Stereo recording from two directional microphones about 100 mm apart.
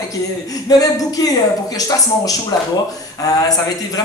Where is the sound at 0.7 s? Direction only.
40° left (ahead or behind).